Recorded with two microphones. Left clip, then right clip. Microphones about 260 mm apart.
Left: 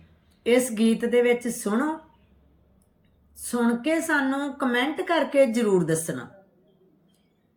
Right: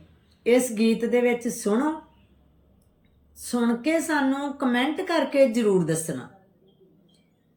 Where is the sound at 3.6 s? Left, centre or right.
Centre.